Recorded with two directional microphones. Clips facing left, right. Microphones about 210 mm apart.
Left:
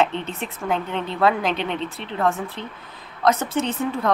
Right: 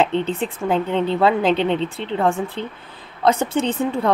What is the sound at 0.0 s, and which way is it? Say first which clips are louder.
Speech: right 4 dB; 30° right (ahead or behind).